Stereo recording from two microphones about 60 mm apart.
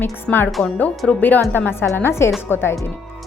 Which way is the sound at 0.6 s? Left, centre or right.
Left.